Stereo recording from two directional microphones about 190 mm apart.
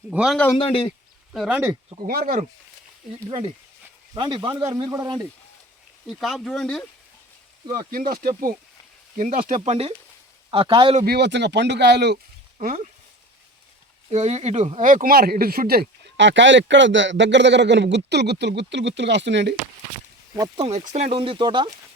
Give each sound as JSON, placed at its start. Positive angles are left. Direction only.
{"t": 0.1, "sound": "speech", "side_deg": -5}
{"t": 0.5, "sound": "speech", "side_deg": 30}
{"t": 1.3, "sound": "speech", "side_deg": -5}
{"t": 2.0, "sound": "speech", "side_deg": -45}
{"t": 3.2, "sound": "speech", "side_deg": -30}
{"t": 6.1, "sound": "speech", "side_deg": 0}
{"t": 7.9, "sound": "speech", "side_deg": -50}
{"t": 11.0, "sound": "speech", "side_deg": -60}
{"t": 12.5, "sound": "speech", "side_deg": -40}
{"t": 14.1, "sound": "speech", "side_deg": -35}
{"t": 20.3, "sound": "speech", "side_deg": -20}
{"t": 20.7, "sound": "speech", "side_deg": -35}